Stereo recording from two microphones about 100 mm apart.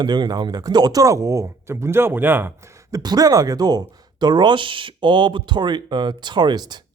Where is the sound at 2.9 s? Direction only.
40° right (ahead or behind).